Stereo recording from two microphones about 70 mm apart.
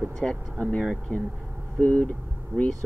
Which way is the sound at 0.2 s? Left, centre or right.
Centre.